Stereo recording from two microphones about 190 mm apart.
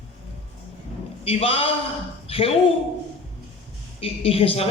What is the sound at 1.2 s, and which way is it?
A man's voice, 30° left (ahead or behind).